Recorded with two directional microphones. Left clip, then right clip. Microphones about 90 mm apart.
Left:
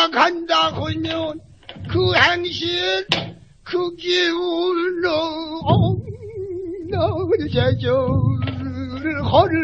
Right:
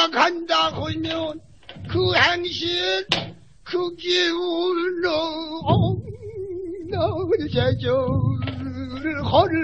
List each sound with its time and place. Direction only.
0.0 s a man's voice: 30° left (ahead or behind)
1.9 s female singing: 25° left (ahead or behind)
6.9 s music: 30° left (ahead or behind)